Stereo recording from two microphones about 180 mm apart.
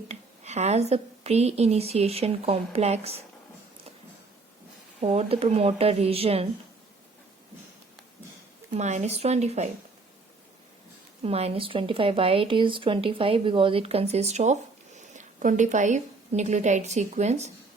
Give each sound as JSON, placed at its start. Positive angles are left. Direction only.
{"t": 0.1, "sound": "speech", "side_deg": -40}
{"t": 4.9, "sound": "speech", "side_deg": -35}
{"t": 8.7, "sound": "speech", "side_deg": -40}
{"t": 11.2, "sound": "speech", "side_deg": -35}